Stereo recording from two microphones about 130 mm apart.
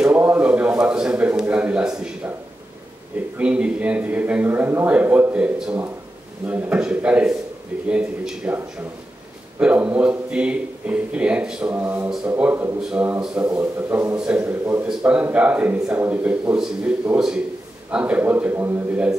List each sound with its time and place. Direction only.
0.0 s a sound: 15° right (ahead or behind)
3.3 s a man's voice: 10° right (ahead or behind)
9.6 s a man's voice: 10° right (ahead or behind)